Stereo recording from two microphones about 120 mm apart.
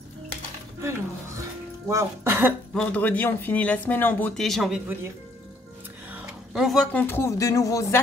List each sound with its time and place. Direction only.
0.7 s dishes: 25° right (ahead or behind)
1.9 s speech: 20° right (ahead or behind)
2.7 s speech: 10° left (ahead or behind)
4.4 s speech: centre (ahead or behind)
6.5 s speech: centre (ahead or behind)
6.9 s speech: 15° left (ahead or behind)